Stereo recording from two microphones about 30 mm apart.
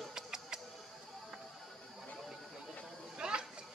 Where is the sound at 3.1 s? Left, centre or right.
Right.